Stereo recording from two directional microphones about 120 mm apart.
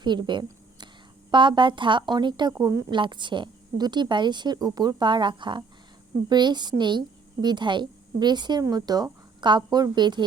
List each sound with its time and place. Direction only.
0.0 s a woman's voice: 40° right (ahead or behind)
2.9 s a woman's voice: 40° right (ahead or behind)